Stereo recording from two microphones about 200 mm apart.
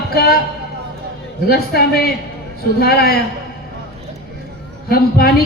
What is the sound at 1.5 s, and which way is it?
Speech, 50° left (ahead or behind).